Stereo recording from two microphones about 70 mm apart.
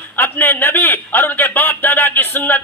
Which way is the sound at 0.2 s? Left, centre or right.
Left.